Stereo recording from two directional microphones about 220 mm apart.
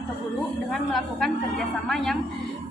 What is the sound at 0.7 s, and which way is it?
A woman's voice, centre (ahead or behind).